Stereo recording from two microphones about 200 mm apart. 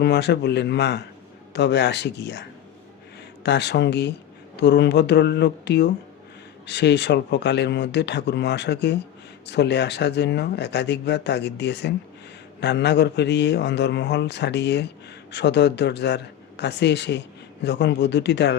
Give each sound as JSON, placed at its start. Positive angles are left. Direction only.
{"t": 0.0, "sound": "a man's voice", "side_deg": 55}